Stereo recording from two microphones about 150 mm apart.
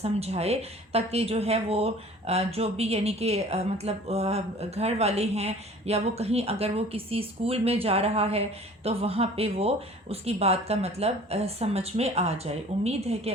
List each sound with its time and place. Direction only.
0.0 s a woman's voice: 45° right (ahead or behind)